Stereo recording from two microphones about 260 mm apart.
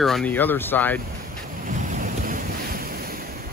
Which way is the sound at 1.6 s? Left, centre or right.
Right.